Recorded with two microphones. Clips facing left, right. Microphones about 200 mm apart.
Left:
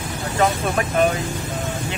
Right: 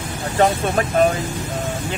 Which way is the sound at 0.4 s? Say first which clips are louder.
Right 3 dB; 35° right (ahead or behind).